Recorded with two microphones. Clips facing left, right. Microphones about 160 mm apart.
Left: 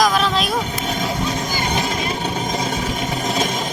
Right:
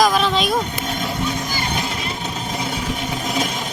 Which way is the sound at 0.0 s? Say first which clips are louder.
Right 1 dB; centre (ahead or behind).